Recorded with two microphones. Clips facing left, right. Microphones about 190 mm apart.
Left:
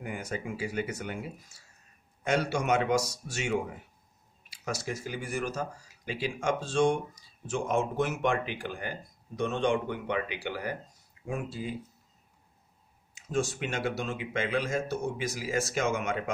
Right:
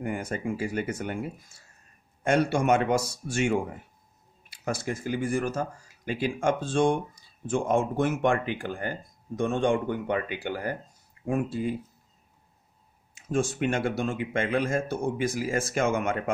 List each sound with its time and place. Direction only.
0.0 s speech: 55° right (ahead or behind)
13.1 s speech: 55° right (ahead or behind)